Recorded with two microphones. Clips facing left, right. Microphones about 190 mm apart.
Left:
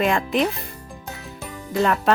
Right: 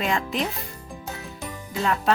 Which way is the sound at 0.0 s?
60° left (ahead or behind).